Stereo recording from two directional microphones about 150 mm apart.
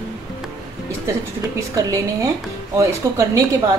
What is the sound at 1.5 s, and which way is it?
A woman's voice, 20° right (ahead or behind).